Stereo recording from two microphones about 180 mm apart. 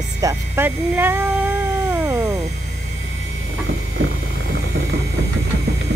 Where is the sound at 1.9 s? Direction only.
20° right (ahead or behind).